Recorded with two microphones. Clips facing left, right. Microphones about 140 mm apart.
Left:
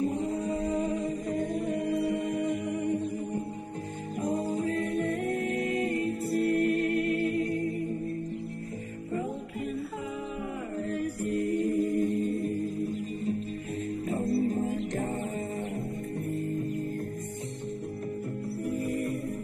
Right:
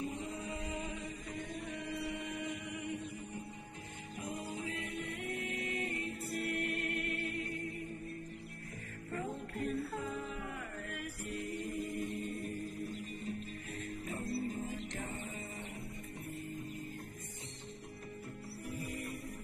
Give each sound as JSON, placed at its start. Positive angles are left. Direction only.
{"t": 0.0, "sound": "music", "side_deg": 40}
{"t": 10.9, "sound": "music", "side_deg": 40}
{"t": 14.0, "sound": "music", "side_deg": 40}
{"t": 18.8, "sound": "music", "side_deg": 45}